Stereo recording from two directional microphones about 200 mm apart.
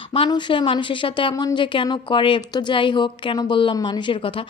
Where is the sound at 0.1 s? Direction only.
25° left (ahead or behind).